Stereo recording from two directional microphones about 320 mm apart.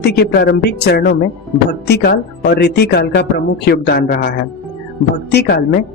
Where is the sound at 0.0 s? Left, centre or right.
Left.